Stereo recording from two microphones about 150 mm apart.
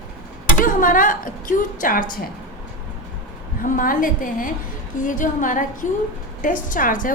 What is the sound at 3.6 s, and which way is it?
A woman's voice, 65° left (ahead or behind).